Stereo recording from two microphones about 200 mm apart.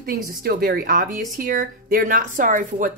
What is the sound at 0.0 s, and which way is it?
Speech, 45° right (ahead or behind).